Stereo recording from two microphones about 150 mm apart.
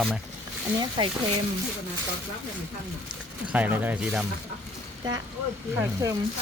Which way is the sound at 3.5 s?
10° right (ahead or behind).